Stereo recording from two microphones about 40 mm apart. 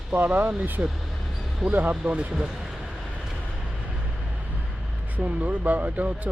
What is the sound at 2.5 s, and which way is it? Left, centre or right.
Vehicle, centre.